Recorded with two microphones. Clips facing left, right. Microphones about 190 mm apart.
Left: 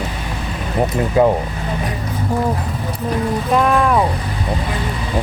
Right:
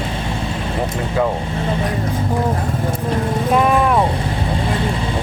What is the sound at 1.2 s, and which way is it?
Speech, 20° left (ahead or behind).